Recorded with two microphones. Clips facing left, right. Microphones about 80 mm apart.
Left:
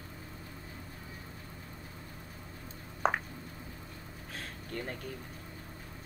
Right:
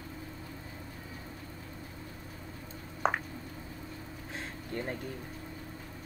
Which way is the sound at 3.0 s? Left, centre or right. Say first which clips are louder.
Even; centre.